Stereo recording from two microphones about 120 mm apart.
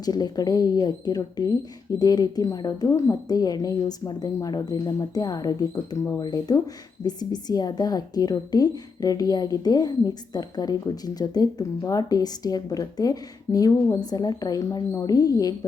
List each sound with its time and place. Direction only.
0.0 s a woman's voice: 35° left (ahead or behind)